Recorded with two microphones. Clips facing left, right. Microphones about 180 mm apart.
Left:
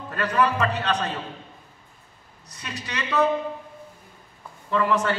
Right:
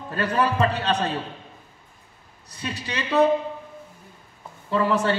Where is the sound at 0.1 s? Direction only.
30° right (ahead or behind).